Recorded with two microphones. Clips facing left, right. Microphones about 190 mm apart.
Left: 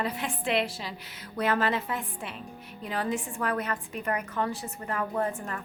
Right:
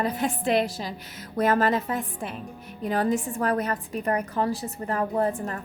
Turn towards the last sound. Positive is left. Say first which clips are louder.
# right 5 dB
turn(degrees=-35)  # may be behind; listen again after turning